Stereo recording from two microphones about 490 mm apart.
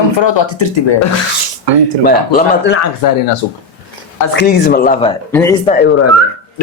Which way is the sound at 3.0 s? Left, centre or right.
Left.